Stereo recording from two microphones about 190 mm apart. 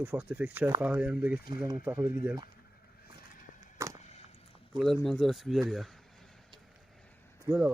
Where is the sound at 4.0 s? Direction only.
35° left (ahead or behind).